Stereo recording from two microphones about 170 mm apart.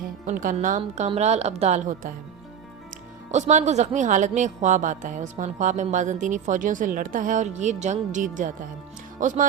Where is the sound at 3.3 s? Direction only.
45° right (ahead or behind).